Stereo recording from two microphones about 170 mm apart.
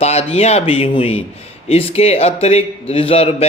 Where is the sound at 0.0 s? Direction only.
40° left (ahead or behind).